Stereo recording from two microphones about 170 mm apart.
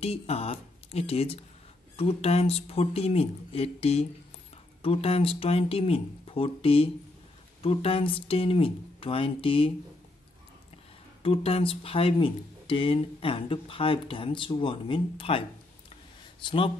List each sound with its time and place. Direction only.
0.0 s speech: 35° left (ahead or behind)
11.2 s speech: 35° left (ahead or behind)